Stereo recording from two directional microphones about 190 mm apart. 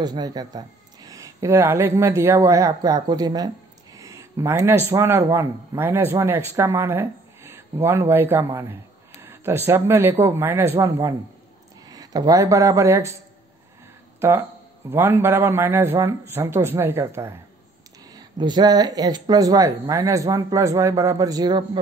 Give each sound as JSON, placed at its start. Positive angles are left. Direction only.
{"t": 0.0, "sound": "a man's voice", "side_deg": -20}
{"t": 14.9, "sound": "a man's voice", "side_deg": -10}